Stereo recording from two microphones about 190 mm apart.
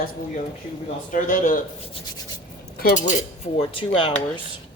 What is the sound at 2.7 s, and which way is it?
Cutlery, 50° left (ahead or behind).